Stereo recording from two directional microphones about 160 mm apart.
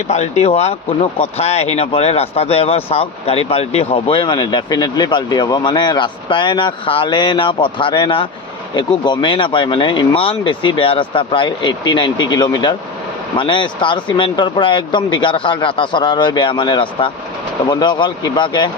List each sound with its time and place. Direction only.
0.1 s speech: 45° left (ahead or behind)